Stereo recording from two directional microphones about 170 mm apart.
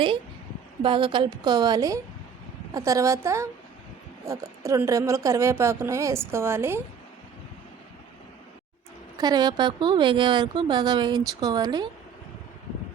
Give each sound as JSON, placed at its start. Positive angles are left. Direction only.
{"t": 0.8, "sound": "a woman's voice", "side_deg": -30}
{"t": 9.1, "sound": "a woman's voice", "side_deg": -25}